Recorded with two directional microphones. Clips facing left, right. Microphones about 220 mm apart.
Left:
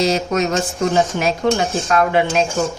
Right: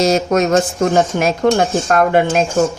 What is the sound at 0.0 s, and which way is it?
Speech, 45° right (ahead or behind).